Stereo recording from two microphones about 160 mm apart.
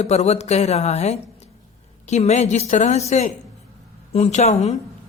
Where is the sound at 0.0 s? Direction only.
45° left (ahead or behind).